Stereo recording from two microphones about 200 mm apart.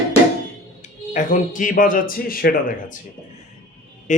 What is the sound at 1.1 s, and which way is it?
A man's voice, 40° left (ahead or behind).